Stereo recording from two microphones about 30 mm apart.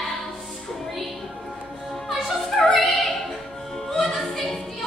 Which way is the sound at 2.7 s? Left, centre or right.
Centre.